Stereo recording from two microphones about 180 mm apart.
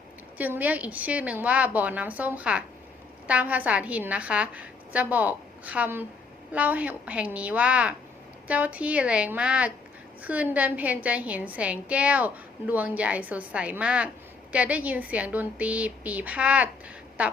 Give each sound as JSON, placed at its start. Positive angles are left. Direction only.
{"t": 0.3, "sound": "a woman's voice", "side_deg": -10}